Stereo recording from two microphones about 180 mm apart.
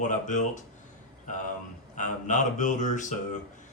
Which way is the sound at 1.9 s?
45° left (ahead or behind).